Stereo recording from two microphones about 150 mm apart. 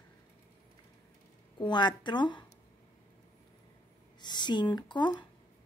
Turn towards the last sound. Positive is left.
turn(degrees=30)  # may be behind; listen again after turning